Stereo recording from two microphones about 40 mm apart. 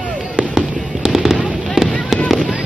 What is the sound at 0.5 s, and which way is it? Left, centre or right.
Fireworks, centre.